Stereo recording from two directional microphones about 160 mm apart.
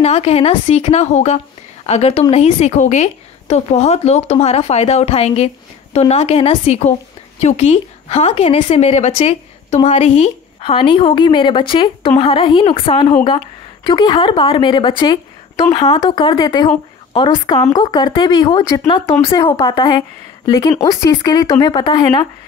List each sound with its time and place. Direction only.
0.0 s a woman's voice: 40° left (ahead or behind)